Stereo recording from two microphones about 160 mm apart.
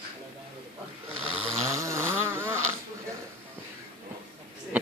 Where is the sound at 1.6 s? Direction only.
20° right (ahead or behind).